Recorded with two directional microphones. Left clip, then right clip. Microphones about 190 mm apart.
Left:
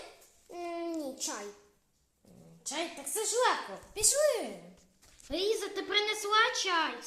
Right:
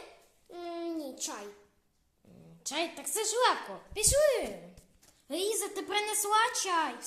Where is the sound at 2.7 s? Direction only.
25° right (ahead or behind).